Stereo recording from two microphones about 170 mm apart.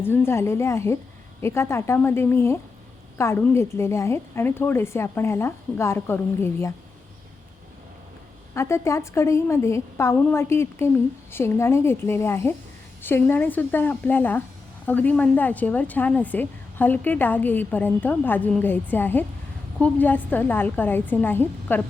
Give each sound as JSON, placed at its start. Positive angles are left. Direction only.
{"t": 0.0, "sound": "a woman's voice", "side_deg": 15}
{"t": 8.5, "sound": "a woman's voice", "side_deg": 15}